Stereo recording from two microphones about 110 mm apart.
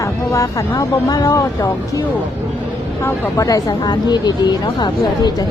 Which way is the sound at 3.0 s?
25° left (ahead or behind).